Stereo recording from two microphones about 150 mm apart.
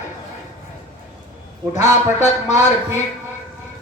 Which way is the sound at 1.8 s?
50° left (ahead or behind).